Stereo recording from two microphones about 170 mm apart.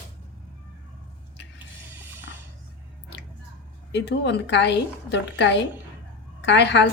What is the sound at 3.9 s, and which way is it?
A woman's voice, 90° left.